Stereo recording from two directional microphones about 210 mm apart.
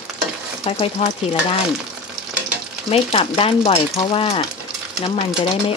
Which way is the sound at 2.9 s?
25° left (ahead or behind).